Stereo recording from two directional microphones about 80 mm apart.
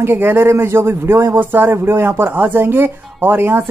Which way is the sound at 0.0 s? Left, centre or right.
Right.